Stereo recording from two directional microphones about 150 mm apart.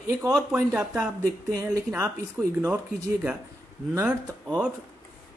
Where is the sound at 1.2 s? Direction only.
20° right (ahead or behind).